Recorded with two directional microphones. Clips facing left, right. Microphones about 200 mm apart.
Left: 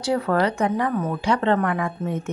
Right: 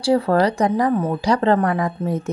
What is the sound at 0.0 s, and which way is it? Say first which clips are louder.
Speech: right 4 dB; 30° right (ahead or behind).